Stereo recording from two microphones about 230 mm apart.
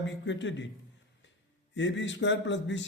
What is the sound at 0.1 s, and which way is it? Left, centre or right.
Speech, left.